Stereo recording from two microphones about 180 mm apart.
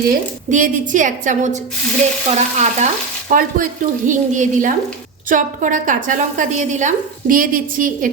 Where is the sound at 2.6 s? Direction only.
45° right (ahead or behind).